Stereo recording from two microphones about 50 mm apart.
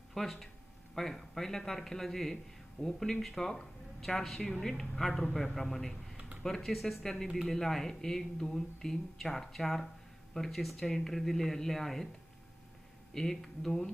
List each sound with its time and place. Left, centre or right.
0.1 s a man's voice: centre
6.1 s a sound: right
6.4 s speech: centre
13.1 s speech: centre